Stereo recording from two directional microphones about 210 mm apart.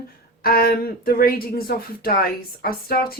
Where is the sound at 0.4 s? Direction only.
45° left (ahead or behind).